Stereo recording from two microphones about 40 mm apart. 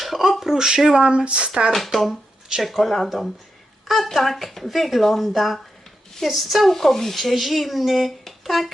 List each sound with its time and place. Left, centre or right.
0.0 s a sound: centre
0.9 s speech: right
1.7 s speech: centre